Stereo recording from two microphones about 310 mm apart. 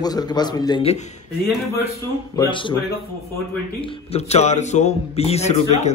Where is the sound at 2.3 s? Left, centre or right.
Centre.